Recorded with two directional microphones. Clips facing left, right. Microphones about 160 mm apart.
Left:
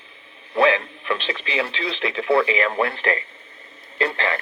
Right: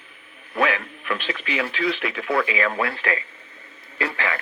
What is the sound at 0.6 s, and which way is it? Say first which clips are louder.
Speech: left 5 dB; 25° left (ahead or behind).